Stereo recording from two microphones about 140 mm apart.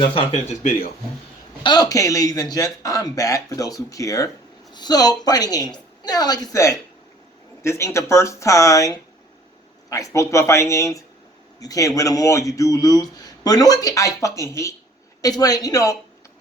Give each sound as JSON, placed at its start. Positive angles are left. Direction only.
{"t": 0.0, "sound": "speech", "side_deg": 40}
{"t": 0.4, "sound": "speech", "side_deg": 65}
{"t": 1.6, "sound": "speech", "side_deg": 30}